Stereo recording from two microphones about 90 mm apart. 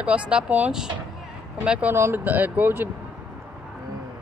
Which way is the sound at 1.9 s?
25° right (ahead or behind).